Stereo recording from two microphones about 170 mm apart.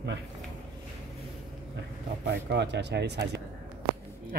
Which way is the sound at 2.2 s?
90° right.